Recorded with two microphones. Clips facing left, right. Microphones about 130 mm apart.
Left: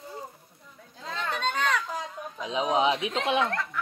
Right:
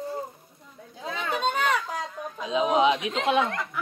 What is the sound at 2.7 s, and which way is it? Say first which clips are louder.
Speech: right 2 dB; 25° left (ahead or behind).